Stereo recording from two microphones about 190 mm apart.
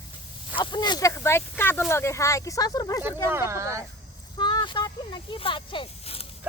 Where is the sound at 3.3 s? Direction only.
15° right (ahead or behind).